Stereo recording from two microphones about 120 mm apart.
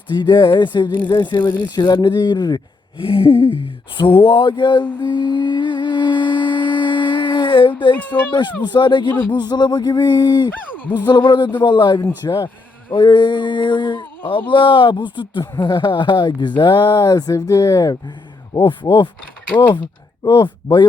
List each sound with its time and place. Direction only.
0.1 s speech: 40° left (ahead or behind)
3.0 s a sound: 50° left (ahead or behind)
7.9 s speech: 15° left (ahead or behind)
8.6 s speech: 40° left (ahead or behind)
20.2 s speech: 40° left (ahead or behind)